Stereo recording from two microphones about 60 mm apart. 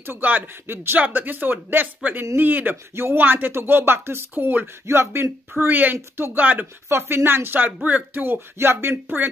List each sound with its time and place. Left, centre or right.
0.0 s speech: right
4.8 s speech: right
6.9 s speech: right